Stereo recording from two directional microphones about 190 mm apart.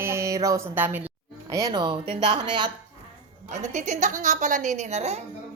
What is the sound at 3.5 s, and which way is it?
A woman's voice, 40° right (ahead or behind).